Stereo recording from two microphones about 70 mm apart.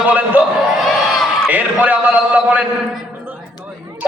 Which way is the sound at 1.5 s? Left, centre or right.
Right.